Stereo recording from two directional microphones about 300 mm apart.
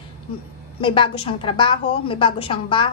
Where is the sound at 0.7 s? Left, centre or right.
Centre.